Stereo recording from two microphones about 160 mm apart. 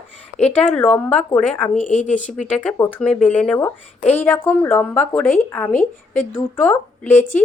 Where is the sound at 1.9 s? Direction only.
50° left (ahead or behind).